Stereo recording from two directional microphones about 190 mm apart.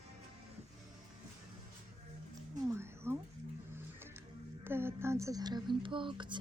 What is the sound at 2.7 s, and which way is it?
Cat, 15° right (ahead or behind).